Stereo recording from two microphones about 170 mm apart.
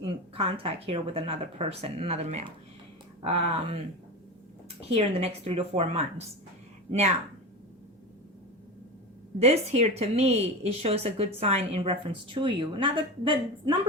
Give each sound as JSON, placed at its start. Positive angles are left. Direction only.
{"t": 0.0, "sound": "speech", "side_deg": -30}
{"t": 4.9, "sound": "speech", "side_deg": -35}
{"t": 9.4, "sound": "speech", "side_deg": -40}